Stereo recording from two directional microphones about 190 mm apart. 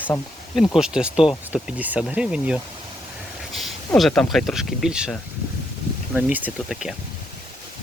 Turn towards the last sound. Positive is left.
turn(degrees=-5)  # may be behind; listen again after turning